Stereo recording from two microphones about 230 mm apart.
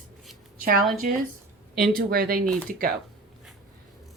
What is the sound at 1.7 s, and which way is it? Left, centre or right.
Speech, right.